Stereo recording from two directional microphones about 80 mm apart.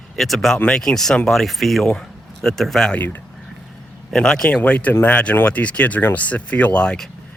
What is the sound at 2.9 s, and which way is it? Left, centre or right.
Speech, left.